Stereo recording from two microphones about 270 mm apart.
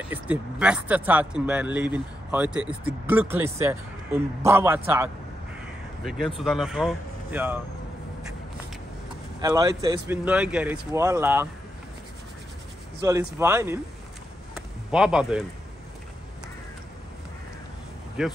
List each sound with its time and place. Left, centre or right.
0.1 s speech: centre
9.4 s speech: centre
13.0 s speech: centre
14.5 s a sound: centre
18.2 s speech: centre